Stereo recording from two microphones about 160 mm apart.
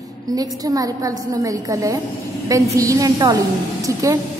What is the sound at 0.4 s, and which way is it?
A woman's voice, 25° right (ahead or behind).